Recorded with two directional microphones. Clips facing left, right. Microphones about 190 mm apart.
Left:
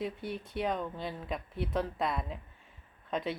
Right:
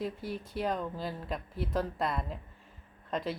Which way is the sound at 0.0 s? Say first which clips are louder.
Even; centre (ahead or behind).